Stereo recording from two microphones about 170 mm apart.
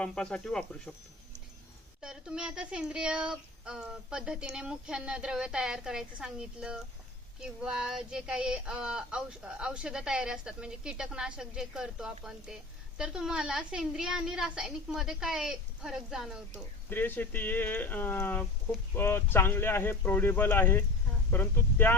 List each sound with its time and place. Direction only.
0.0 s speech: 5° left (ahead or behind)
2.0 s speech: 5° right (ahead or behind)
16.9 s speech: 10° left (ahead or behind)